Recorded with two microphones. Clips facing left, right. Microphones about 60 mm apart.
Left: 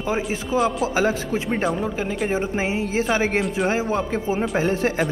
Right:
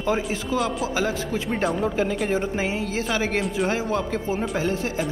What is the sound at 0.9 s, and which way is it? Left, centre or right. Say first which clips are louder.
Speech: left 3 dB; left.